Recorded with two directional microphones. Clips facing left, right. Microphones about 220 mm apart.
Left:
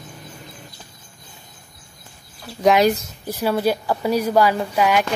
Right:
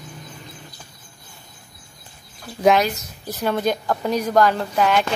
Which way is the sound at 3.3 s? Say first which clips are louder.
Left 2 dB; 5° left (ahead or behind).